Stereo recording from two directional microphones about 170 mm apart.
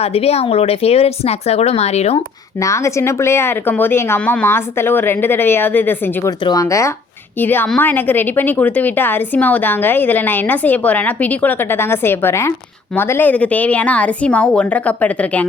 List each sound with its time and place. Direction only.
0.0 s speech: 35° left (ahead or behind)
2.6 s a woman's voice: 15° left (ahead or behind)